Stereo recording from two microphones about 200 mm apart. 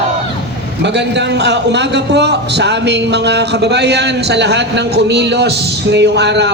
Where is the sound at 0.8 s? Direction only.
60° right (ahead or behind).